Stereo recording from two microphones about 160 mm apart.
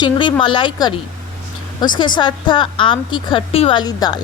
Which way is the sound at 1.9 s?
30° left (ahead or behind).